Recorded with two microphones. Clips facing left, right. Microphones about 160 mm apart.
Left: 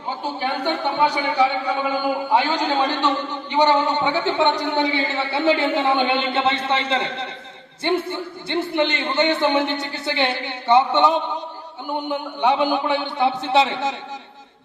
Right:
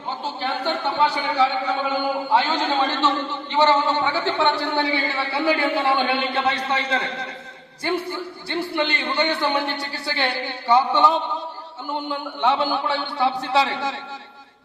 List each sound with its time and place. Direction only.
0.1 s a man's voice: 15° left (ahead or behind)